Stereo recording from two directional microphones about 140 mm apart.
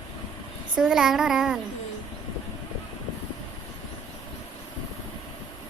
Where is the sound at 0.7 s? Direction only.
5° right (ahead or behind).